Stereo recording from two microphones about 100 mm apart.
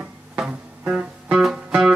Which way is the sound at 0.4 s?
10° right (ahead or behind).